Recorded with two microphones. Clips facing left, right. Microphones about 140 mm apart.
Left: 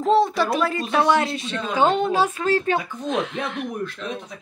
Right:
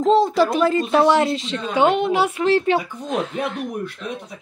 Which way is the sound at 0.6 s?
30° right (ahead or behind).